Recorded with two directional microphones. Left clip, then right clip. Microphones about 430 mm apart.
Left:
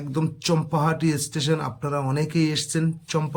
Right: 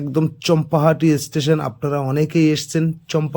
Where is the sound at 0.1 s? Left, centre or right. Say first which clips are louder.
Right 7 dB; centre.